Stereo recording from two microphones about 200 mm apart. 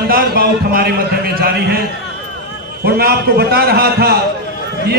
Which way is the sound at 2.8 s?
50° right (ahead or behind).